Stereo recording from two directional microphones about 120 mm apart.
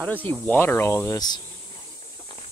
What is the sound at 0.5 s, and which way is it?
Speech, 15° left (ahead or behind).